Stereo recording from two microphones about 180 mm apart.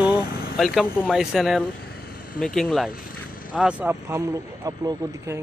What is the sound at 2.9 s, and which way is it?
Vehicle, 55° left (ahead or behind).